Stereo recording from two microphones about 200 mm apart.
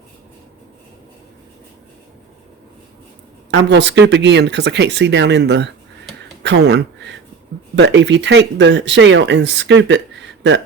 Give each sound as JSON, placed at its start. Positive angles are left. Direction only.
{"t": 3.5, "sound": "speech", "side_deg": -60}